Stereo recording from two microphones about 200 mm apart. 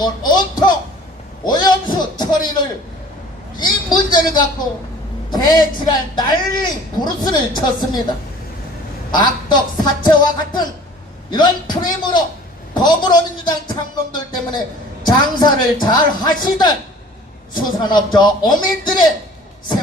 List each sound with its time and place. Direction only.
0.0 s music: 20° left (ahead or behind)
1.5 s speech: 20° left (ahead or behind)
3.6 s a man's voice: 20° left (ahead or behind)
9.1 s a man's voice: 20° left (ahead or behind)